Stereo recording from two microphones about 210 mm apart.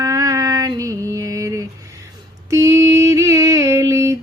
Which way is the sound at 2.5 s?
15° right (ahead or behind).